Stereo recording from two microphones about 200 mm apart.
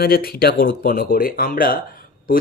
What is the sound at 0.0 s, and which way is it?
Speech, 50° left (ahead or behind).